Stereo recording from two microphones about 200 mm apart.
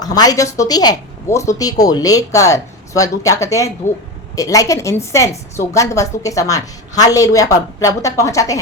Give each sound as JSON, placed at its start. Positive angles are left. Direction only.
{"t": 0.0, "sound": "a woman's voice", "side_deg": 20}